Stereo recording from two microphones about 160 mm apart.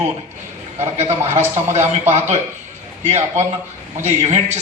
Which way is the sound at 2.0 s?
45° right (ahead or behind).